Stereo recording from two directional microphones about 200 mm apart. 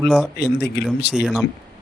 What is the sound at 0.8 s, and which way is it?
Speech, 60° left (ahead or behind).